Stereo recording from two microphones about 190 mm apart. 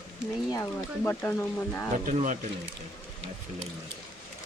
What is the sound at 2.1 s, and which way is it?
Speech, 40° right (ahead or behind).